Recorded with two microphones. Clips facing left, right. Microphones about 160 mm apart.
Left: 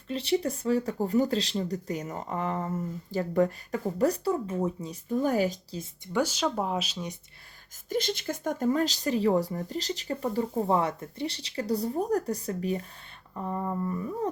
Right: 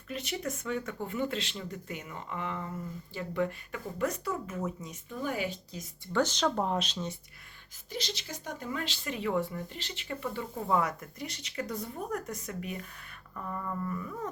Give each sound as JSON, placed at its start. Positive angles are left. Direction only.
{"t": 0.1, "sound": "speech", "side_deg": 30}
{"t": 6.1, "sound": "speech", "side_deg": 10}
{"t": 7.9, "sound": "speech", "side_deg": 50}